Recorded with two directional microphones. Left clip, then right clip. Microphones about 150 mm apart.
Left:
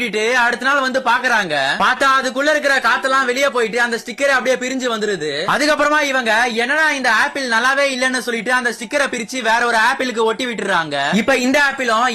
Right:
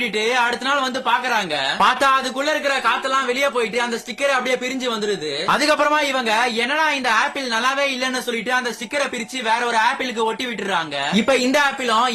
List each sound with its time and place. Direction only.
0.2 s a man's voice: 30° left (ahead or behind)
11.3 s a man's voice: 20° left (ahead or behind)